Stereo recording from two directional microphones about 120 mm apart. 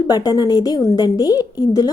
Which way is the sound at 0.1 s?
35° left (ahead or behind).